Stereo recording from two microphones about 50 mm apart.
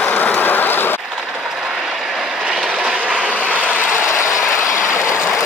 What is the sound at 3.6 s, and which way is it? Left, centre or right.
Vehicle, left.